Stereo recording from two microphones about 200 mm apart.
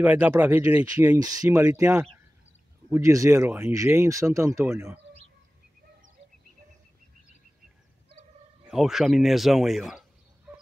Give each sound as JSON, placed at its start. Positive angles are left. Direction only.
{"t": 0.0, "sound": "speech", "side_deg": -10}
{"t": 8.6, "sound": "speech", "side_deg": 0}